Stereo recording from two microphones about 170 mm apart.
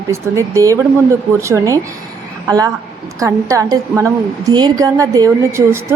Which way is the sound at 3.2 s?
20° right (ahead or behind).